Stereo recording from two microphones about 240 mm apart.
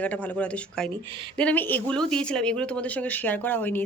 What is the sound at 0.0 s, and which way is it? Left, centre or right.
Speech, centre.